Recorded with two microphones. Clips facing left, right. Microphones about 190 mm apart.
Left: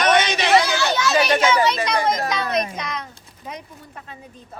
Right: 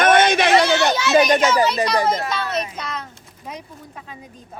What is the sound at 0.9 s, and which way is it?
Speech, 15° right (ahead or behind).